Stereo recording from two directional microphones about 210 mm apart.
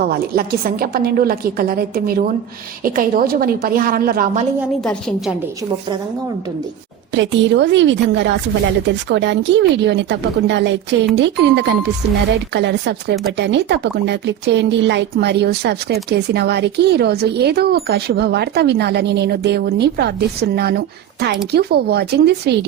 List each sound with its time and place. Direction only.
0.0 s speech: 45° right (ahead or behind)
4.6 s a woman's voice: 5° left (ahead or behind)
7.1 s a woman's voice: 60° right (ahead or behind)